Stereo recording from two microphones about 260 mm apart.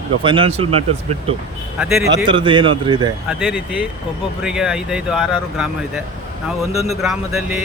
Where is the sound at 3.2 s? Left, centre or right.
Centre.